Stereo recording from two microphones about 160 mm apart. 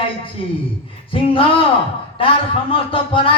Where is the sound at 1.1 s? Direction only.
35° left (ahead or behind).